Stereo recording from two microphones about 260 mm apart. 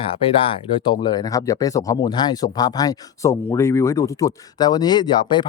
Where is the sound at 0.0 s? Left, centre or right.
Left.